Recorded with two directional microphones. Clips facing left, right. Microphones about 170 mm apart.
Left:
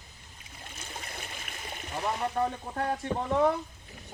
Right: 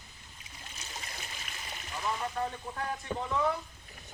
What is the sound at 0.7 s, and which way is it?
Stream, 55° left (ahead or behind).